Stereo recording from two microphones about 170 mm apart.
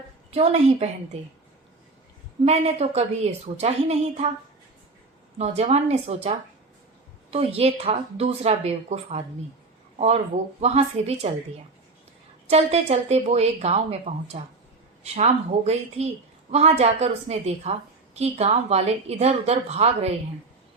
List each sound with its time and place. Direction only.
0.3 s a woman's voice: 40° right (ahead or behind)
2.4 s a woman's voice: 40° right (ahead or behind)
5.4 s a woman's voice: 40° right (ahead or behind)
7.3 s a woman's voice: 35° right (ahead or behind)
10.6 s a woman's voice: 40° right (ahead or behind)
12.5 s a woman's voice: 40° right (ahead or behind)